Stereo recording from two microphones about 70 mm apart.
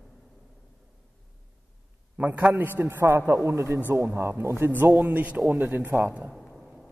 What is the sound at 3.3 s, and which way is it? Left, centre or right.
A woman's voice, right.